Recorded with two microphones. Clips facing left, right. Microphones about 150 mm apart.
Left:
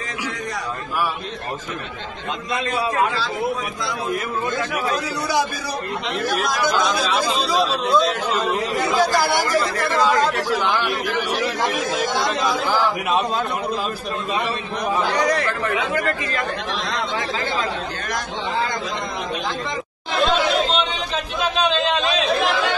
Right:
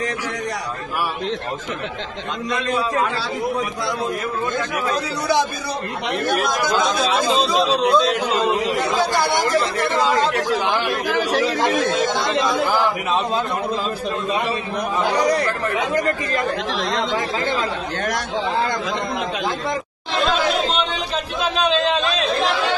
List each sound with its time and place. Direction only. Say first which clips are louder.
6.0 s speech: right 4 dB; 60° right (ahead or behind)
7.2 s speech: right 3 dB; centre (ahead or behind)
10.3 s a man's voice: right 1 dB; 15° right (ahead or behind)
11.5 s speech: right 4 dB; centre (ahead or behind)
15.0 s a man's voice: right 4 dB; 10° right (ahead or behind)
15.9 s speech: right 2 dB; 40° right (ahead or behind)
20.2 s chatter: left 1 dB; centre (ahead or behind)